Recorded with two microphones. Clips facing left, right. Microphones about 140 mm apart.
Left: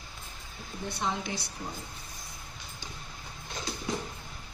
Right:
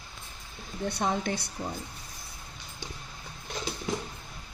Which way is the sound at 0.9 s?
65° right (ahead or behind).